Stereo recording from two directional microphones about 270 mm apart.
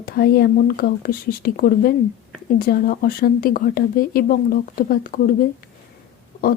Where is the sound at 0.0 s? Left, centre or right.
Left.